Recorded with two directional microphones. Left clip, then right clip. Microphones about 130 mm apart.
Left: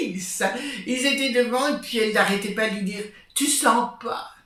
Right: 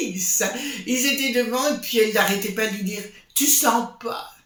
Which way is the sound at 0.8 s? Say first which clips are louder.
Right 1 dB; 30° right (ahead or behind).